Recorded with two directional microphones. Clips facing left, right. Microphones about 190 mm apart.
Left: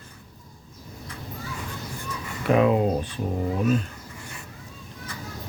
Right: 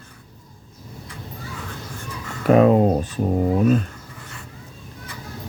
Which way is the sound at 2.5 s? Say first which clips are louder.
Right 5 dB; 40° right (ahead or behind).